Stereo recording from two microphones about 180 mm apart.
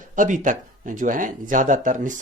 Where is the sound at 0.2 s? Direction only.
45° right (ahead or behind).